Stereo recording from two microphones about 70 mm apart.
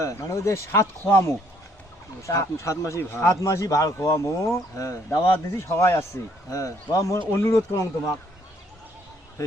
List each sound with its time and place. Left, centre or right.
0.0 s speech: left
2.2 s speech: left
3.0 s speech: left
5.2 s speech: left